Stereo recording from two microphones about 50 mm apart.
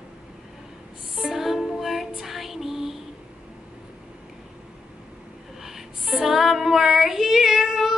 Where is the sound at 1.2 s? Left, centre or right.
Centre.